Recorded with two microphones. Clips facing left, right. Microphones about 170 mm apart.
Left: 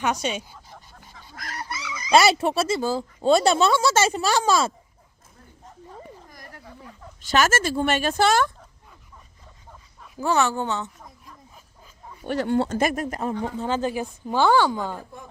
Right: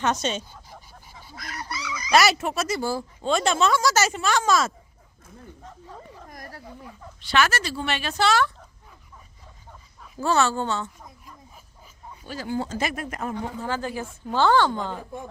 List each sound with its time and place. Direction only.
0.0 s speech: 10° left (ahead or behind)
0.7 s vehicle: 5° right (ahead or behind)
1.4 s honk: 40° left (ahead or behind)
1.7 s speech: 25° left (ahead or behind)
3.2 s speech: 35° left (ahead or behind)
6.1 s a sound: 50° right (ahead or behind)
7.2 s speech: 45° left (ahead or behind)
10.2 s speech: 15° left (ahead or behind)
12.2 s speech: 65° left (ahead or behind); by 13.7 s 30° left (ahead or behind)
13.7 s speech: 20° left (ahead or behind)